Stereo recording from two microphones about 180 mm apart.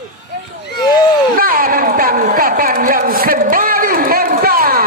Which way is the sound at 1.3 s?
50° right (ahead or behind).